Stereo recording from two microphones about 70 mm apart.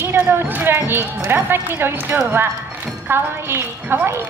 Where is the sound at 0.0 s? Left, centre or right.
Right.